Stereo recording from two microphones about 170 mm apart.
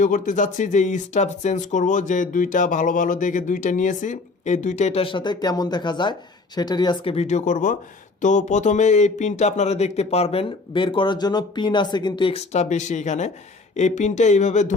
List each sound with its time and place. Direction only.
0.0 s speech: 50° left (ahead or behind)